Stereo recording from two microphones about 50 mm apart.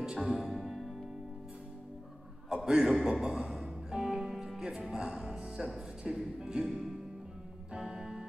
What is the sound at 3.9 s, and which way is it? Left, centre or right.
Music, centre.